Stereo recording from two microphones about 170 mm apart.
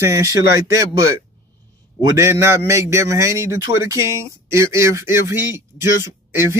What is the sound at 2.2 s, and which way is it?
Speech, 15° right (ahead or behind).